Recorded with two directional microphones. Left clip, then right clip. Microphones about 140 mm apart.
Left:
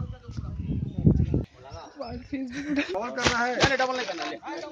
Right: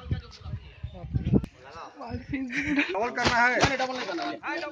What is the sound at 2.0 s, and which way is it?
Speech, 35° left (ahead or behind).